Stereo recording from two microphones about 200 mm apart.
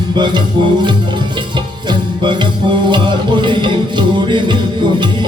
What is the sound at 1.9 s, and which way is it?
Music, 25° right (ahead or behind).